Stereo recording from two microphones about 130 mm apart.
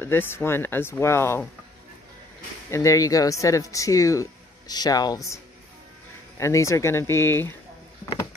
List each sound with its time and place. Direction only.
0.0 s speech: 15° left (ahead or behind)
2.7 s speech: 25° left (ahead or behind)